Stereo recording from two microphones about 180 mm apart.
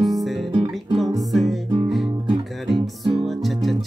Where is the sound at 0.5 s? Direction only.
30° right (ahead or behind).